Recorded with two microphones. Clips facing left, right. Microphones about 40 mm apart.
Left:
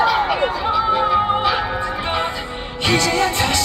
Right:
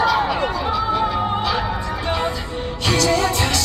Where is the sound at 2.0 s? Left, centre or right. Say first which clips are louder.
Left 1 dB; left.